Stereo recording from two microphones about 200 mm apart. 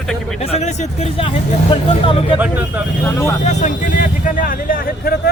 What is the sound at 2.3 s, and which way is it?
Speech, 5° right (ahead or behind).